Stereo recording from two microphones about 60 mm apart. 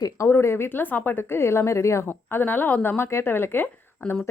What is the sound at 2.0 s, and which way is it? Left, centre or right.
Speech, left.